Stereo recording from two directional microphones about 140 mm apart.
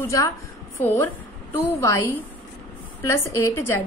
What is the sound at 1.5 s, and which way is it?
A woman's voice, 20° left (ahead or behind).